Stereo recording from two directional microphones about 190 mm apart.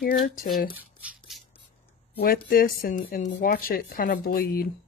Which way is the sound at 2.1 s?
50° left (ahead or behind).